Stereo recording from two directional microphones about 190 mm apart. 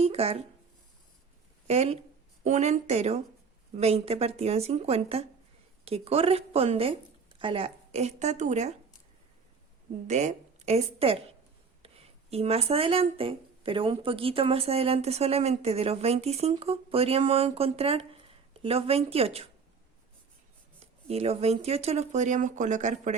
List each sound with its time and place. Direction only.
0.0 s speech: 30° right (ahead or behind)
1.6 s speech: 35° right (ahead or behind)
10.1 s a woman's voice: 35° right (ahead or behind)
20.7 s speech: 30° right (ahead or behind)